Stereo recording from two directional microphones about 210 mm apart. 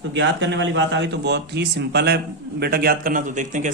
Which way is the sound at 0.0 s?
60° right (ahead or behind).